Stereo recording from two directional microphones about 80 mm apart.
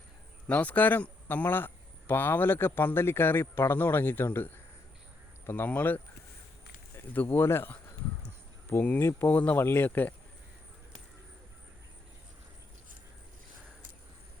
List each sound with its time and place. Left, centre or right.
0.4 s a man's voice: centre